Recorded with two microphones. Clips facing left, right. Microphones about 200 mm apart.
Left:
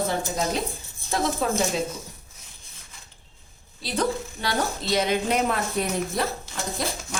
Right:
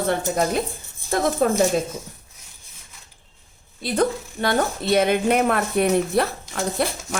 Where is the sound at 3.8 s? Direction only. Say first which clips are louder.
Right 4 dB; 55° right (ahead or behind).